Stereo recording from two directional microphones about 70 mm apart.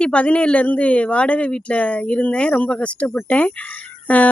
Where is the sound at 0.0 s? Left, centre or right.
Centre.